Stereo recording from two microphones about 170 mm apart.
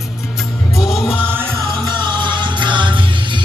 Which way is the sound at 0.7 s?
Centre (ahead or behind).